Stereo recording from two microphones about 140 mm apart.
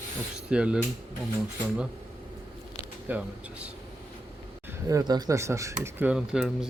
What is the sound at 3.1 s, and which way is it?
Speech, 10° right (ahead or behind).